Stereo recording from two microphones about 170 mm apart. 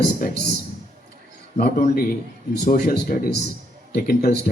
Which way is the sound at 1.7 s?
50° left (ahead or behind).